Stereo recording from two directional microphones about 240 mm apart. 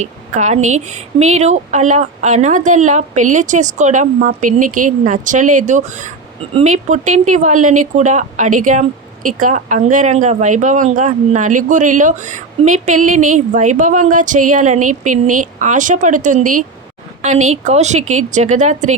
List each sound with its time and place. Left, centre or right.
0.0 s speech: right